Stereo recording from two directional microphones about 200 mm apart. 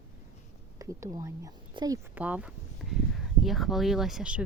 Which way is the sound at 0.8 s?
15° right (ahead or behind).